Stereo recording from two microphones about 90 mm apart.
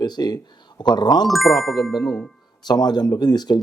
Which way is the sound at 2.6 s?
50° left (ahead or behind).